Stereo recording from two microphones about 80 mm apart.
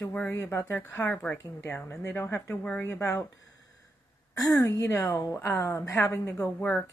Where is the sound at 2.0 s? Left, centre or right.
Left.